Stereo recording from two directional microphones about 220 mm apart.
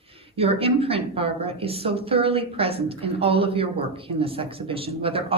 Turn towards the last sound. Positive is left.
turn(degrees=-25)  # may be behind; listen again after turning